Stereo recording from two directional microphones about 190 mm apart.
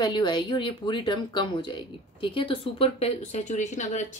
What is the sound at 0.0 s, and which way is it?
Speech, 25° left (ahead or behind).